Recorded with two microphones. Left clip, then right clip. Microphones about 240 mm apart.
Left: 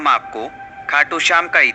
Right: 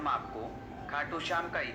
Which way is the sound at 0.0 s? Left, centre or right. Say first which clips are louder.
Left 17 dB; left.